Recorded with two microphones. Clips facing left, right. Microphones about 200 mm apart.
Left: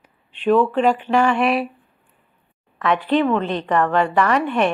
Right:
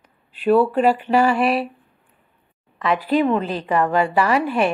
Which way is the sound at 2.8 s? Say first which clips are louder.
Even; 5° right (ahead or behind).